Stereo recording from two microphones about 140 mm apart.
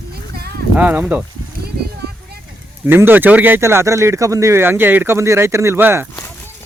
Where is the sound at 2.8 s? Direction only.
15° right (ahead or behind).